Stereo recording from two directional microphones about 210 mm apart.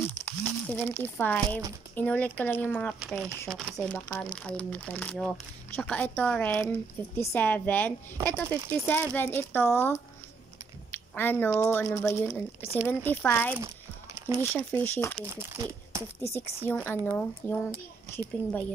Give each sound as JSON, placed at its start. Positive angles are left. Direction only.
{"t": 0.0, "sound": "crumpling", "side_deg": 10}
{"t": 2.0, "sound": "speech", "side_deg": 5}
{"t": 12.6, "sound": "speech", "side_deg": -10}
{"t": 13.0, "sound": "speech", "side_deg": 10}
{"t": 15.2, "sound": "speech", "side_deg": -15}
{"t": 16.3, "sound": "speech", "side_deg": 10}